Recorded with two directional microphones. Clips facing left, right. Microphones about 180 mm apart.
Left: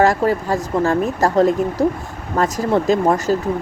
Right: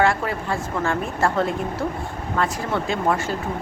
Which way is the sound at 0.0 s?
40° left (ahead or behind).